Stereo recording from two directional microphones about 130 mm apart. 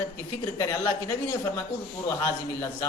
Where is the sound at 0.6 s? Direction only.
25° left (ahead or behind).